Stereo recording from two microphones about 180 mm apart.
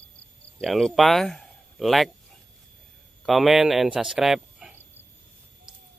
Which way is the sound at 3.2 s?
Centre (ahead or behind).